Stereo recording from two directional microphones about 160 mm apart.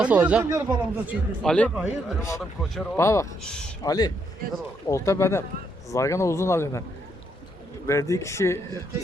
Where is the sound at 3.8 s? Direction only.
25° left (ahead or behind).